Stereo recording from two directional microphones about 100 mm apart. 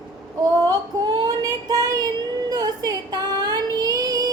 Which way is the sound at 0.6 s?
40° right (ahead or behind).